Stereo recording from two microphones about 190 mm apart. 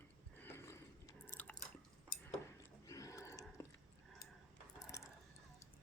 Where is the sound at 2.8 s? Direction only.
15° left (ahead or behind).